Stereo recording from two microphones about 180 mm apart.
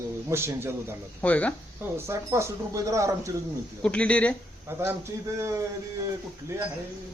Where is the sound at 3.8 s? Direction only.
5° left (ahead or behind).